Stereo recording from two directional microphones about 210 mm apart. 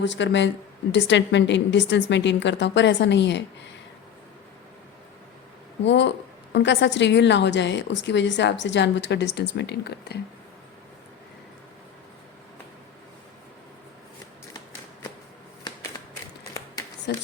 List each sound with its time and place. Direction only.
0.0 s a woman's voice: 60° left (ahead or behind)
5.8 s a woman's voice: 60° left (ahead or behind)
17.1 s speech: 55° left (ahead or behind)